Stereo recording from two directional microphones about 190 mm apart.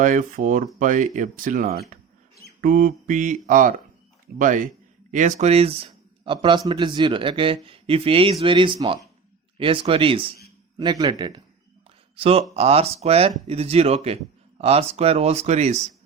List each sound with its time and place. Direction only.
0.0 s speech: 40° right (ahead or behind)